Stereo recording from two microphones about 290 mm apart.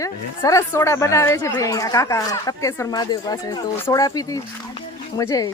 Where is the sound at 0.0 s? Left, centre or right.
Centre.